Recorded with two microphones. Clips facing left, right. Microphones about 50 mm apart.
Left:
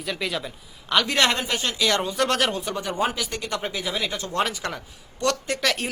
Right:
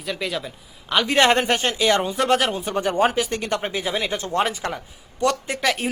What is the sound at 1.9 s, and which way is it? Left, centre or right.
Speech, centre.